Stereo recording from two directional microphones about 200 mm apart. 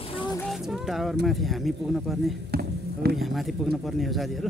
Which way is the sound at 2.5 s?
50° right (ahead or behind).